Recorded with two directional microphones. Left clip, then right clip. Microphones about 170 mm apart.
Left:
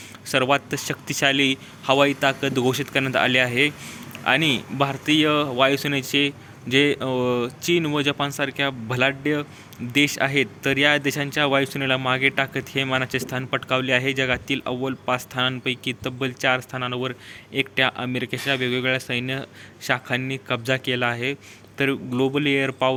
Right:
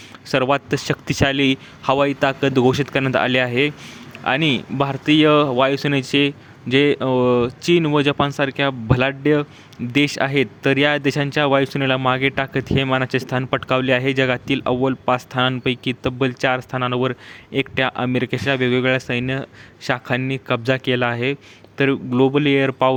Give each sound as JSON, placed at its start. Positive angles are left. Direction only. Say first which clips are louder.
{"t": 0.3, "sound": "speech", "louder": "right 2 dB", "side_deg": -35}